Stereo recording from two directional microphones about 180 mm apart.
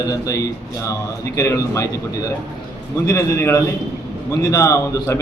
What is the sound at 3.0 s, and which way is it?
A man's voice, 15° left (ahead or behind).